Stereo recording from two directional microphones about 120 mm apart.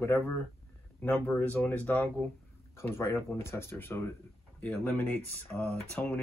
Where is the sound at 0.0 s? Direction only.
20° left (ahead or behind).